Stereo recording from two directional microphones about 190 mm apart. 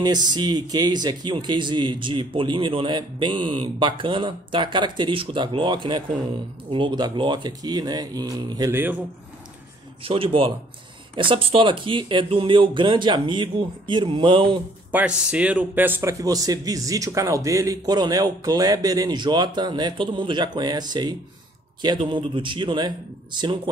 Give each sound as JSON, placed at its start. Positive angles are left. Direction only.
{"t": 0.0, "sound": "a man's voice", "side_deg": -20}
{"t": 10.0, "sound": "a man's voice", "side_deg": -30}
{"t": 14.9, "sound": "a man's voice", "side_deg": -5}